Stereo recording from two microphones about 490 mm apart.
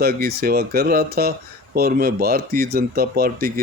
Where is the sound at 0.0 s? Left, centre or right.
Centre.